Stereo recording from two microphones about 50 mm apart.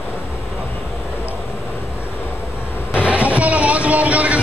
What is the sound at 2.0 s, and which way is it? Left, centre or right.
Vehicle, left.